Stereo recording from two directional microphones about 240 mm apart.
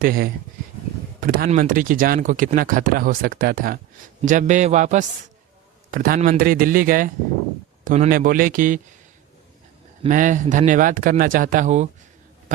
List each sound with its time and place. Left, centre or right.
0.0 s speech: right
10.0 s speech: right